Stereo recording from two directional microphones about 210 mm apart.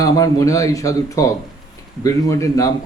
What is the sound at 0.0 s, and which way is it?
A man's voice, 15° left (ahead or behind).